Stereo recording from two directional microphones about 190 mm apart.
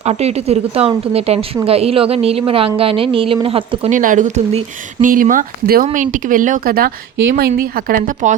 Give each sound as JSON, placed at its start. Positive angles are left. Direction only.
{"t": 0.0, "sound": "a woman's voice", "side_deg": -35}